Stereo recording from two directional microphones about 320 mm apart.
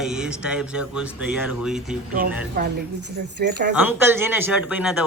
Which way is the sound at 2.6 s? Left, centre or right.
Right.